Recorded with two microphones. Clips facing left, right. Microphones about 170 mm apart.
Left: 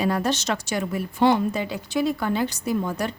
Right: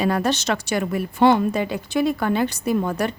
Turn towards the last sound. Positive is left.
turn(degrees=-60)  # may be behind; listen again after turning